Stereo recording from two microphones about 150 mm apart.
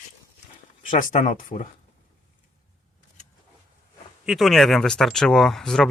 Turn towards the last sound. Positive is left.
turn(degrees=0)  # may be behind; listen again after turning